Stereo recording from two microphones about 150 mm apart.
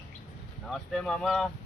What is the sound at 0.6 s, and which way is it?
Speech, 5° left (ahead or behind).